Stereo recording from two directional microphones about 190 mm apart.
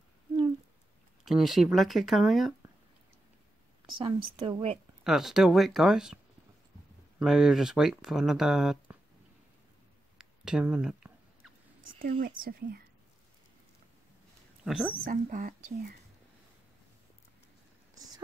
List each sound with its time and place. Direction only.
1.2 s speech: centre (ahead or behind)
4.0 s speech: 25° right (ahead or behind)
5.0 s speech: centre (ahead or behind)
7.2 s speech: centre (ahead or behind)
10.1 s a sound: 5° right (ahead or behind)
12.2 s speech: 50° right (ahead or behind)
14.6 s a woman's voice: 5° right (ahead or behind)
15.0 s speech: 45° right (ahead or behind)
17.9 s a sound: 20° right (ahead or behind)